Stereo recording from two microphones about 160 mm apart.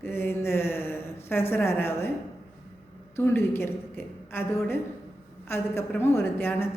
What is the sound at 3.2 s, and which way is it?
A woman's voice, 15° left (ahead or behind).